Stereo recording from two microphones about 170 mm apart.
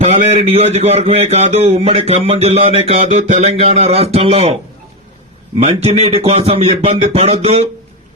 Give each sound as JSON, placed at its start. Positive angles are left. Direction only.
{"t": 0.0, "sound": "a man's voice", "side_deg": -35}
{"t": 5.5, "sound": "a man's voice", "side_deg": -35}